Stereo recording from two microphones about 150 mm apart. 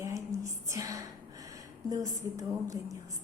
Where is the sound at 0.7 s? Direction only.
20° right (ahead or behind).